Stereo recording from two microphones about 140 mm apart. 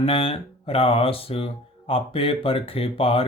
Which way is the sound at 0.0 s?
40° left (ahead or behind).